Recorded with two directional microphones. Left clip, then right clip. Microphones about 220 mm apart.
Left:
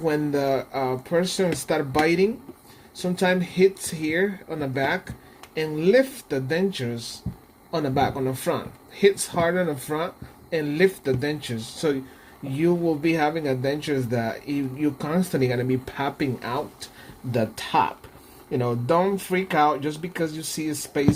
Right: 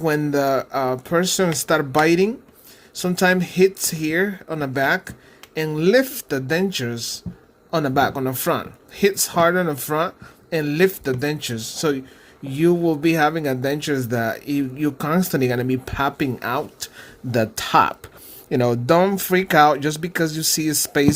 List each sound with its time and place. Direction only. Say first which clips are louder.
0.0 s speech: right 4 dB; 25° right (ahead or behind)